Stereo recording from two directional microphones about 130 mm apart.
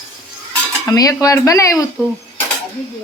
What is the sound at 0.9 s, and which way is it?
Stir, 25° left (ahead or behind).